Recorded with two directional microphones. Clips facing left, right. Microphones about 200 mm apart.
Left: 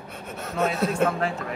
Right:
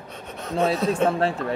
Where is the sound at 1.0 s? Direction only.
35° right (ahead or behind).